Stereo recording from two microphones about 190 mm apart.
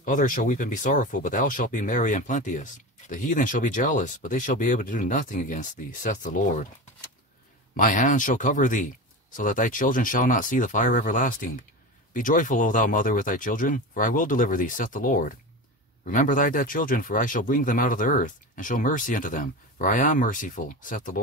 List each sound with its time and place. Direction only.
0.0 s speech: 45° left (ahead or behind)
7.7 s speech: 45° left (ahead or behind)